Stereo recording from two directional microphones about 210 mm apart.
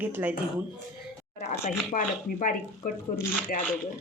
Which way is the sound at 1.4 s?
35° left (ahead or behind).